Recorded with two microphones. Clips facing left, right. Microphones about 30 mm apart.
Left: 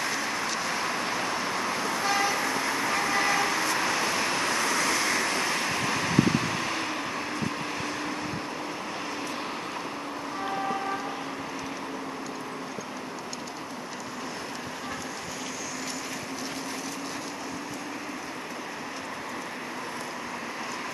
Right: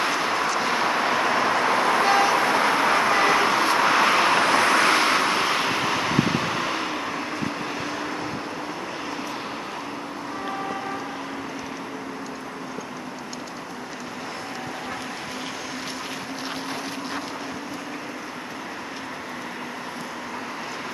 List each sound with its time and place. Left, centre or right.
0.0 s vehicle: right; by 8.2 s centre
10.4 s train: centre